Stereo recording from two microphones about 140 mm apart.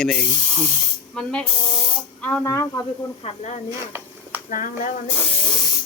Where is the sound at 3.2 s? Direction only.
50° left (ahead or behind).